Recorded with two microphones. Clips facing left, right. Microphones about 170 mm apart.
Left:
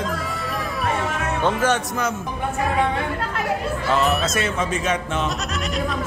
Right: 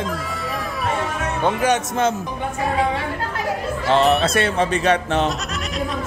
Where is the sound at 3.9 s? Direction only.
30° right (ahead or behind).